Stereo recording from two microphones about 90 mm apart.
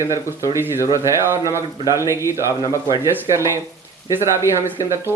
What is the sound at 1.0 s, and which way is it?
A man's voice, 30° right (ahead or behind).